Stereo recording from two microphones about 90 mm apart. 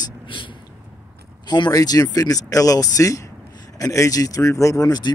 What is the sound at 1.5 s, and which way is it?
Speech, 50° left (ahead or behind).